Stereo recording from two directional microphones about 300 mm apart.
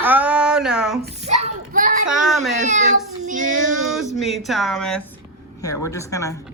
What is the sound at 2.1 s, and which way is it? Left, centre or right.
Speech, centre.